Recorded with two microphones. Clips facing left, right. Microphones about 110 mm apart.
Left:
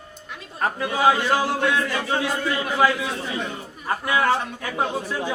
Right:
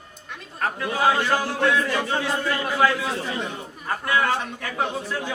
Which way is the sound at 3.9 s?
15° left (ahead or behind).